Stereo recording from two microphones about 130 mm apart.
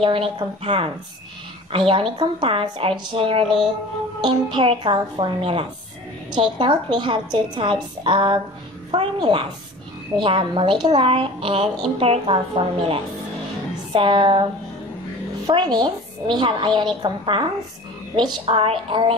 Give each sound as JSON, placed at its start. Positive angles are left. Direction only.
{"t": 0.0, "sound": "a woman's voice", "side_deg": -45}
{"t": 15.4, "sound": "a woman's voice", "side_deg": -35}